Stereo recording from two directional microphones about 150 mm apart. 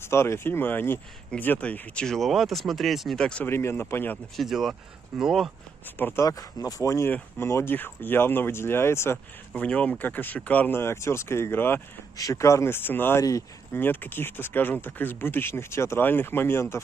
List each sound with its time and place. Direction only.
0.0 s speech: 15° left (ahead or behind)
4.4 s speech: centre (ahead or behind)
5.9 s speech: 15° left (ahead or behind)